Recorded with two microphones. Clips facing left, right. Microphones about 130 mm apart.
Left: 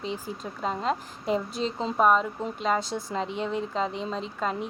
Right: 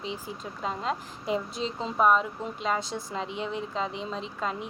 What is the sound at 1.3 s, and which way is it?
A woman's voice, 40° left (ahead or behind).